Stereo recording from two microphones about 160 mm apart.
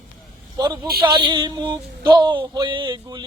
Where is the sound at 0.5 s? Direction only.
25° right (ahead or behind).